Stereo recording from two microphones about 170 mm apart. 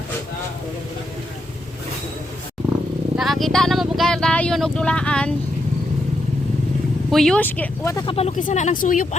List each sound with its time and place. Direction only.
3.2 s speech: centre (ahead or behind)
7.1 s speech: 5° left (ahead or behind)
7.9 s speech: 30° left (ahead or behind)
8.3 s speech: 50° left (ahead or behind)